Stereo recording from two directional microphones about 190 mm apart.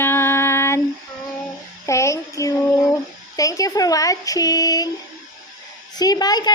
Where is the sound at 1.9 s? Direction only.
15° left (ahead or behind).